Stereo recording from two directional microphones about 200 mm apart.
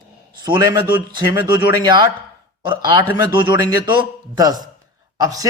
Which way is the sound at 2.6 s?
25° right (ahead or behind).